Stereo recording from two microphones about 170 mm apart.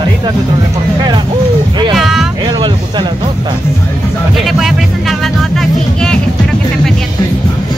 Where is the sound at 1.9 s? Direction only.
Centre (ahead or behind).